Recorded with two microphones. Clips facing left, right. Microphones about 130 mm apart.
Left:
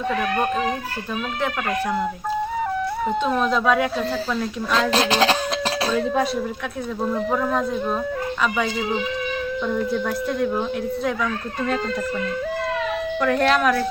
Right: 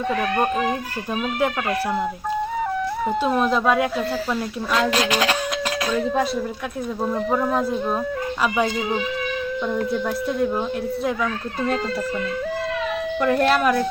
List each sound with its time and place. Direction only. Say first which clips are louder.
0.1 s speech: right 1 dB; centre (ahead or behind)
3.2 s speech: right 1 dB; 5° right (ahead or behind)
4.9 s speech: left 2 dB; 30° left (ahead or behind)
5.9 s speech: right 1 dB; centre (ahead or behind)
9.6 s speech: even; centre (ahead or behind)
13.2 s speech: right 1 dB; 5° right (ahead or behind)